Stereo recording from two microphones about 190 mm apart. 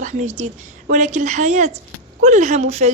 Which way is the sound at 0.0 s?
40° right (ahead or behind).